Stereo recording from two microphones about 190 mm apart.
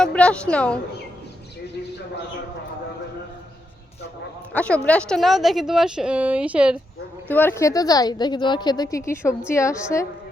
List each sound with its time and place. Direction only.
0.0 s a woman's voice: 5° left (ahead or behind)
4.5 s a woman's voice: 5° left (ahead or behind)
7.3 s a woman's voice: 10° left (ahead or behind)